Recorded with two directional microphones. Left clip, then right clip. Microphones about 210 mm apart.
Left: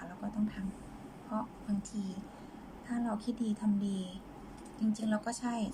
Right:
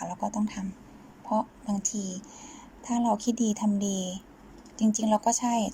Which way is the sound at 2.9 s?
20° right (ahead or behind).